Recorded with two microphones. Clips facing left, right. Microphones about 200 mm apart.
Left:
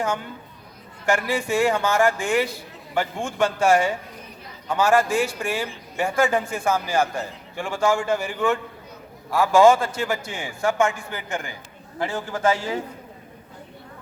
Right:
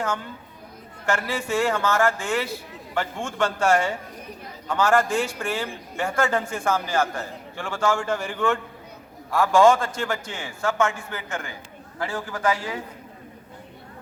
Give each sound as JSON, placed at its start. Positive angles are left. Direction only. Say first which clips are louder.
{"t": 1.3, "sound": "a man's voice", "louder": "left 2 dB", "side_deg": 10}